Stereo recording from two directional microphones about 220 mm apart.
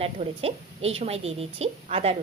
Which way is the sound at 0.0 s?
25° right (ahead or behind).